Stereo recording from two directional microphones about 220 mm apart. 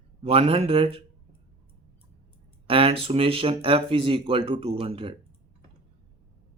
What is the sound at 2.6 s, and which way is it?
Speech, 25° right (ahead or behind).